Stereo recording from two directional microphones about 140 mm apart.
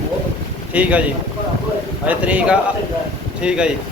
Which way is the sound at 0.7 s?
10° right (ahead or behind).